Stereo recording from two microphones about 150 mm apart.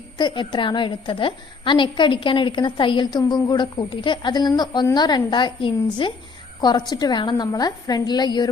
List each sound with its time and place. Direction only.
0.2 s a woman's voice: 30° left (ahead or behind)